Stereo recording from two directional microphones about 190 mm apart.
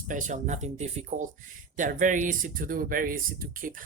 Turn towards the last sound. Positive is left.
turn(degrees=-45)  # may be behind; listen again after turning